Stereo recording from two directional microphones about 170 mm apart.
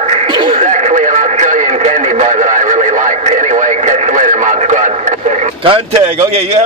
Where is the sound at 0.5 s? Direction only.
45° right (ahead or behind).